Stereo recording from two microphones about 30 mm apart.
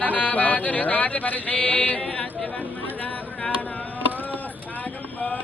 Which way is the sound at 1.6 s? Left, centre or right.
Left.